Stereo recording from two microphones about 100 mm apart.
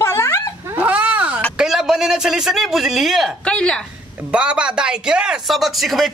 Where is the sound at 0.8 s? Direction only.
15° right (ahead or behind).